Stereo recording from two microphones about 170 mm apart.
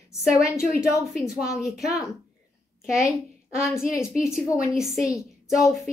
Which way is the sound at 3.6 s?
5° right (ahead or behind).